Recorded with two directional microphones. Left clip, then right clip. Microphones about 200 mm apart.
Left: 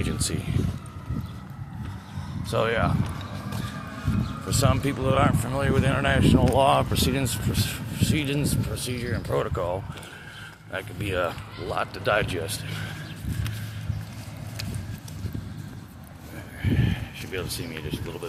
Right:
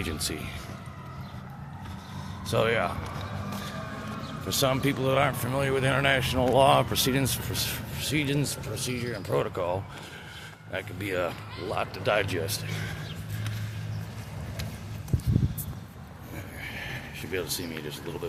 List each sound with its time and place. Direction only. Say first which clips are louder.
0.0 s speech: left 2 dB; centre (ahead or behind)
2.5 s speech: left 1 dB; 10° right (ahead or behind)
4.4 s speech: even; 10° right (ahead or behind)
16.7 s a sound: left 7 dB; 10° right (ahead or behind)